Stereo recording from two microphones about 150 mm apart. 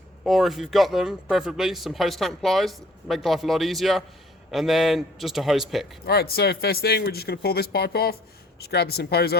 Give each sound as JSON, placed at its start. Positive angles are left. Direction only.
{"t": 0.3, "sound": "speech", "side_deg": 0}
{"t": 6.1, "sound": "speech", "side_deg": 90}